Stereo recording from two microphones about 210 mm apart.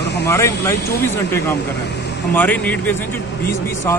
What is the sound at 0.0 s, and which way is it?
Vehicle, 55° left (ahead or behind).